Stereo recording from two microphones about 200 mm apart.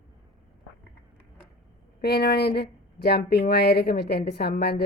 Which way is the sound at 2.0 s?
50° left (ahead or behind).